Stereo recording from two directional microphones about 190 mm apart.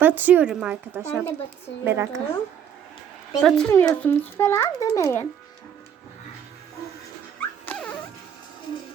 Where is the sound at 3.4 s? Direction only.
5° left (ahead or behind).